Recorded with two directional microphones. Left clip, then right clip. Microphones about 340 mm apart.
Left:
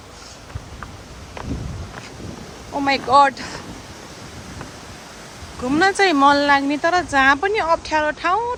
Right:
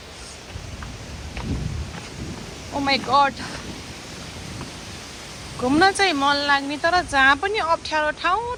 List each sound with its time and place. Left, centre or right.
2.7 s speech: centre
5.6 s speech: centre